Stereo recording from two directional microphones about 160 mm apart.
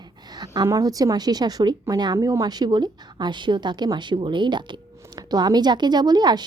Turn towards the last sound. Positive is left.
turn(degrees=-25)  # may be behind; listen again after turning